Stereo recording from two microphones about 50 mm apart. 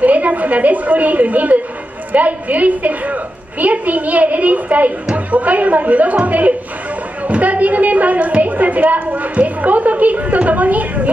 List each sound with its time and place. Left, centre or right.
0.0 s a woman's voice: right